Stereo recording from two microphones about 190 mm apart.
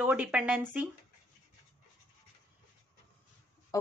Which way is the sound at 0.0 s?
5° right (ahead or behind).